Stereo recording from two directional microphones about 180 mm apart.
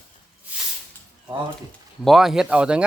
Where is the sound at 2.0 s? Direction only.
Centre (ahead or behind).